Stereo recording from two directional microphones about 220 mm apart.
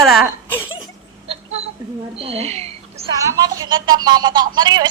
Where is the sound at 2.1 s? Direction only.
25° right (ahead or behind).